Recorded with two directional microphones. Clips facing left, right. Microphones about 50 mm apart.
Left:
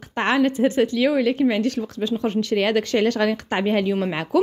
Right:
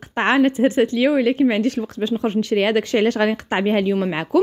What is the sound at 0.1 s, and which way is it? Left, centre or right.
A woman's voice, right.